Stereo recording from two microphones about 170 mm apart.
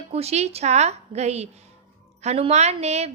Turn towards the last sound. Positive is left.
turn(degrees=-40)  # may be behind; listen again after turning